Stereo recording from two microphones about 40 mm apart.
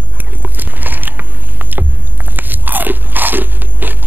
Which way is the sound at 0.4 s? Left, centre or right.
Right.